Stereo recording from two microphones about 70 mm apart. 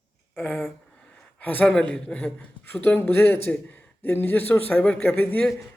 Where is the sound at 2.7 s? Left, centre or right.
Left.